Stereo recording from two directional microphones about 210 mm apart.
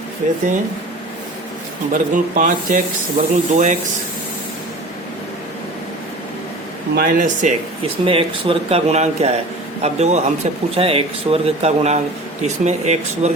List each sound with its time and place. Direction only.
1.9 s speech: 40° right (ahead or behind)
6.9 s speech: 45° right (ahead or behind)
8.0 s speech: 25° right (ahead or behind)